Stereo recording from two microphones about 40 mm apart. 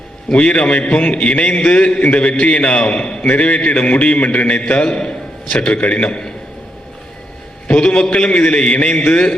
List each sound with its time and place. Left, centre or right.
0.3 s a man's voice: left
7.8 s a man's voice: left